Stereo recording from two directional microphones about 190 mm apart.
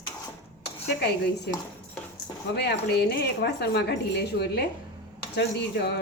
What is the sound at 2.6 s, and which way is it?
Speech, 60° left (ahead or behind).